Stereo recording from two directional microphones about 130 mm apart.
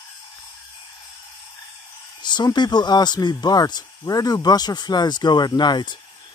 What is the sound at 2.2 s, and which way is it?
Speech, 35° left (ahead or behind).